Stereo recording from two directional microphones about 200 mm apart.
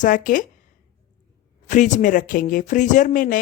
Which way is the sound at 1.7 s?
40° left (ahead or behind).